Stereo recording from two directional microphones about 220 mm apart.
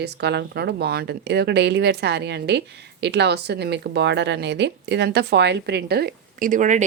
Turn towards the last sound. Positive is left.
turn(degrees=-35)  # may be behind; listen again after turning